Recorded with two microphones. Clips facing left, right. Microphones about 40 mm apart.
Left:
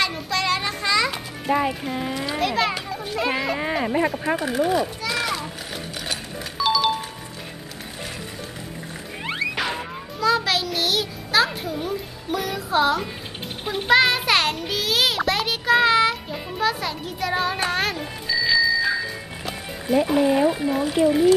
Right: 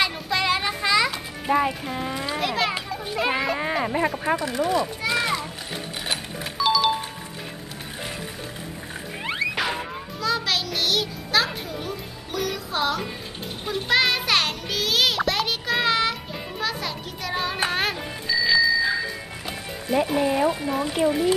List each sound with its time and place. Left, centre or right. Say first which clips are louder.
0.0 s music: even; centre
1.4 s speech: even; centre
2.9 s children playing: even; centre
3.4 s speech: left 1 dB; centre
4.4 s speech: left 2 dB; centre
5.0 s children playing: right 1 dB; centre
6.6 s music: even; centre
9.2 s music: even; centre
20.1 s speech: left 4 dB; centre